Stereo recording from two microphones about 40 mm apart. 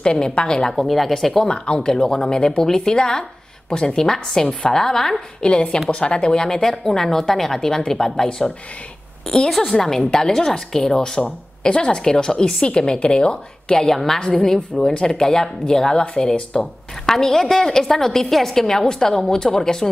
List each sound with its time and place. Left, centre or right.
0.0 s a woman's voice: left
0.7 s speech: centre
1.5 s a woman's voice: left
1.9 s a woman's voice: centre
5.4 s a woman's voice: left
17.0 s a woman's voice: centre